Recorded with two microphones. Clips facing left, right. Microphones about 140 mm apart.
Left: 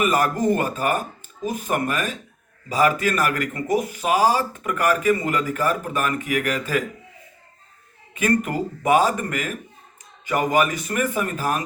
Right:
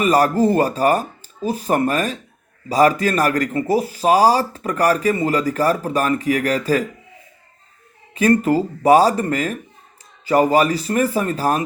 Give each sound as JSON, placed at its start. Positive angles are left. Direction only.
{"t": 0.0, "sound": "speech", "side_deg": -35}
{"t": 8.1, "sound": "speech", "side_deg": -30}